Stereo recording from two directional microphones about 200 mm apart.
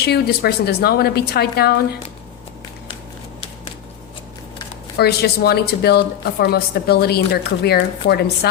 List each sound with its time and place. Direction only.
0.0 s a woman's voice: 55° left (ahead or behind)
4.9 s a woman's voice: 50° left (ahead or behind)